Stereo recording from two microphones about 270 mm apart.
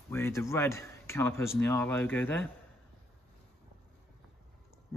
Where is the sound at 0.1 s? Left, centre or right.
Centre.